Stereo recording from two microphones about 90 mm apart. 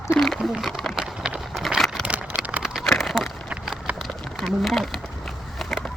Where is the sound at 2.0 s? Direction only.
15° right (ahead or behind).